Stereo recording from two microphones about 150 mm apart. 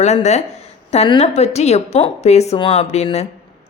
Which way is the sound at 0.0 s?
50° left (ahead or behind).